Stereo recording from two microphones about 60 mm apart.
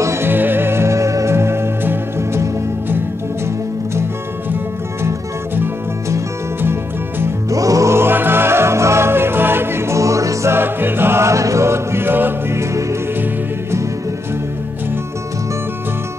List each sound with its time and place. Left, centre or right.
0.0 s music: right
0.3 s music: right
6.6 s music: right
7.4 s music: right
7.9 s music: right
10.5 s music: right